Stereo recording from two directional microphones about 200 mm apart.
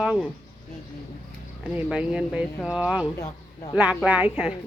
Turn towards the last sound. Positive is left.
turn(degrees=-5)  # may be behind; listen again after turning